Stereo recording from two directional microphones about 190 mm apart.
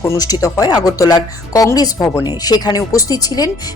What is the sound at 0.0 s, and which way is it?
Speech, 15° left (ahead or behind).